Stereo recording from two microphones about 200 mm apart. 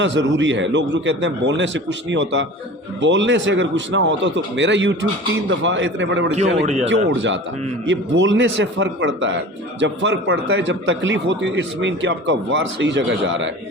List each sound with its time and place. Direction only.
0.0 s a man's voice: 65° right (ahead or behind)
6.3 s a man's voice: 35° right (ahead or behind)
6.8 s a man's voice: 65° right (ahead or behind)